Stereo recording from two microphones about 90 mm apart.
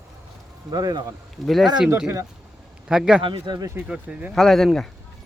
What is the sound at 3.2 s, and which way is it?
Speech, 70° right (ahead or behind).